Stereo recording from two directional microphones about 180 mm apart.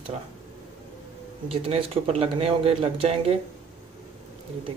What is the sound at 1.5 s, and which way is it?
Speech, 35° right (ahead or behind).